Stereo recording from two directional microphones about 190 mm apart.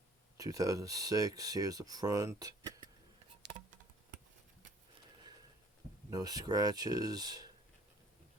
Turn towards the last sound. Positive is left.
turn(degrees=-20)  # may be behind; listen again after turning